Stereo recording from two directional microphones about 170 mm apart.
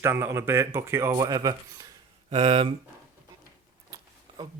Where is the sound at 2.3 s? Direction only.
30° right (ahead or behind).